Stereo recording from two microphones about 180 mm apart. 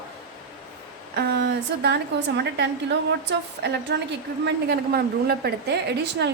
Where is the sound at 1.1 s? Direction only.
70° right (ahead or behind).